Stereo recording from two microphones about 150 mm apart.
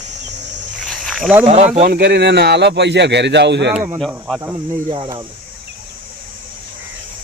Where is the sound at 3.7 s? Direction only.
15° right (ahead or behind).